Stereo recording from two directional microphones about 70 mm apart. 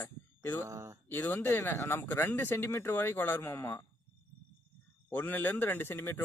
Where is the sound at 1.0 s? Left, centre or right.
Left.